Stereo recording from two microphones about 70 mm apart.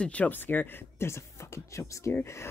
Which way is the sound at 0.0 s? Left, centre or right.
Left.